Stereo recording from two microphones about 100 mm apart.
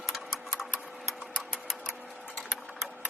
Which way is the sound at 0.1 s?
Centre (ahead or behind).